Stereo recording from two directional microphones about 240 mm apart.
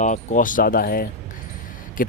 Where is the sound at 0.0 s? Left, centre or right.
Left.